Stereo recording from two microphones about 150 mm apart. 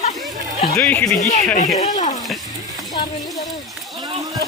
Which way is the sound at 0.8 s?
10° left (ahead or behind).